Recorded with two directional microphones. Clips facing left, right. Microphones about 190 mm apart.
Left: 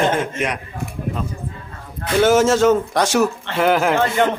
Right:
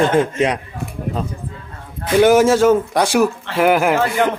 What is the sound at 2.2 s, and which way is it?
A man's voice, 10° right (ahead or behind).